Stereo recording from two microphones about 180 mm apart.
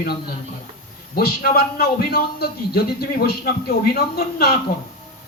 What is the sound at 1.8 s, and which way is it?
Speech, 60° left (ahead or behind).